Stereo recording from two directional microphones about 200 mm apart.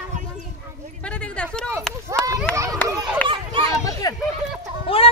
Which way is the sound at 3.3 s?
25° right (ahead or behind).